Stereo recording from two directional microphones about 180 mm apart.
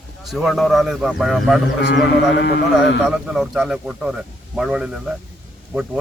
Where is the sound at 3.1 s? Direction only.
5° right (ahead or behind).